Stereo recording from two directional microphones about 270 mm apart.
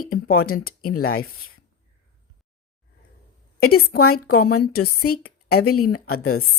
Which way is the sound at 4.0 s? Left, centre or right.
Left.